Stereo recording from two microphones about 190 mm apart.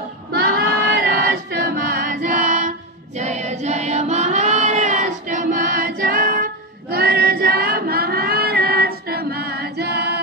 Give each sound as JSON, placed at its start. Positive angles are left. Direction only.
{"t": 0.3, "sound": "choir", "side_deg": -55}
{"t": 3.2, "sound": "child singing", "side_deg": -35}